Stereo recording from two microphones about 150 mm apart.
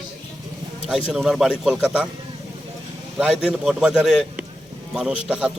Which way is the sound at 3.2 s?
5° right (ahead or behind).